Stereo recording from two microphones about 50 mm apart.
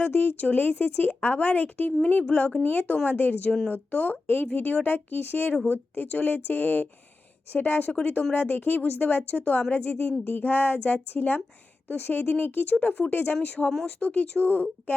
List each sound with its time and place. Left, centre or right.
0.0 s speech: left